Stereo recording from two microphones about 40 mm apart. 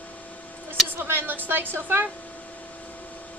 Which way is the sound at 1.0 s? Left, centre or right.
Right.